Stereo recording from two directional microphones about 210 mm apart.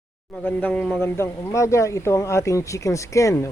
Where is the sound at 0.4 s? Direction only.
5° left (ahead or behind).